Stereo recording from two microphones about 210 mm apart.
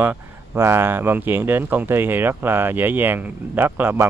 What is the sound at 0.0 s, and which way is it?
Speech, 10° right (ahead or behind).